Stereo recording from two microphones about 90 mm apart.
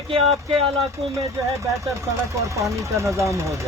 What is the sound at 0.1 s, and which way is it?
Speech, 90° right.